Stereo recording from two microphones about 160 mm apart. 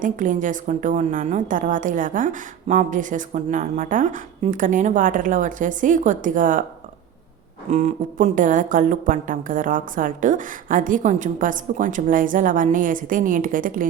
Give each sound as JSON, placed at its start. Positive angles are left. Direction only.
{"t": 0.0, "sound": "a woman's voice", "side_deg": -55}
{"t": 7.7, "sound": "a woman's voice", "side_deg": -45}